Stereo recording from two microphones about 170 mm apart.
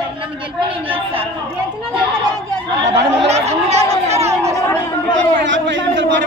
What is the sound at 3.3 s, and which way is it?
Chatter, 40° right (ahead or behind).